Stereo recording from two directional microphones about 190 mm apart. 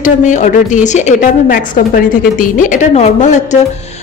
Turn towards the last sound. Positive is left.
turn(degrees=40)  # may be behind; listen again after turning